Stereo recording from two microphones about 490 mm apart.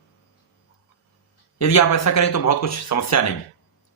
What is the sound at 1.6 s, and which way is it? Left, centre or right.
A man's voice, left.